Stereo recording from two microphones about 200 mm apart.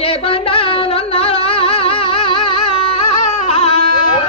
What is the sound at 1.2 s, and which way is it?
Music, 30° left (ahead or behind).